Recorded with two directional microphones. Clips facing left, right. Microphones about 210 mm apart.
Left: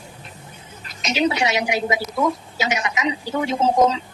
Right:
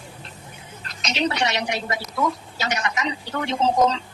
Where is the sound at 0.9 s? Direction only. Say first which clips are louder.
Left 4 dB; 5° left (ahead or behind).